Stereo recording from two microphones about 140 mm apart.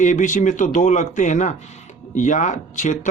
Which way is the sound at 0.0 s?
60° left (ahead or behind).